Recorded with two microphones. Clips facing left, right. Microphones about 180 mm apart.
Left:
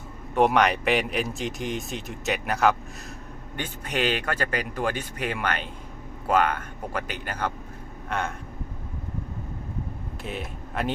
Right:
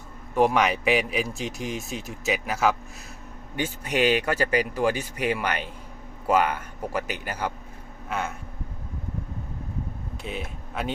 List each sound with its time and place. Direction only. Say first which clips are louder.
0.3 s a man's voice: left 1 dB; centre (ahead or behind)
10.2 s speech: even; centre (ahead or behind)